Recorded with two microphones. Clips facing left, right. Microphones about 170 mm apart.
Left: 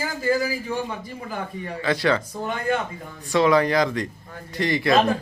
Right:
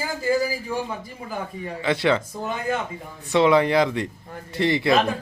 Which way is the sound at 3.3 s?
25° right (ahead or behind).